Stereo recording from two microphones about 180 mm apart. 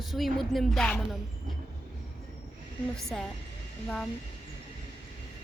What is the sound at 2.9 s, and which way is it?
Speech, 5° left (ahead or behind).